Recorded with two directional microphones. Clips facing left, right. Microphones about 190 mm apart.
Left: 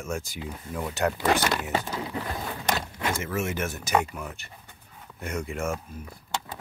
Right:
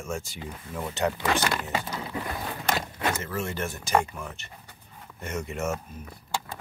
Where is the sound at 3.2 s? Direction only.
15° left (ahead or behind).